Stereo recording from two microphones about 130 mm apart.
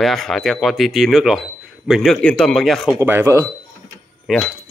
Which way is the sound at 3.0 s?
20° right (ahead or behind).